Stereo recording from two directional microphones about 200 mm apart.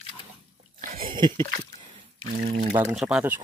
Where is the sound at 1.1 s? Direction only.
25° right (ahead or behind).